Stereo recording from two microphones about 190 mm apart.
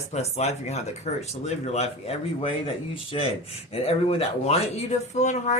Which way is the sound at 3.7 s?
30° left (ahead or behind).